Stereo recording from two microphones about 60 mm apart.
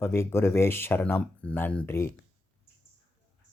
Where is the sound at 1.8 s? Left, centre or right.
Left.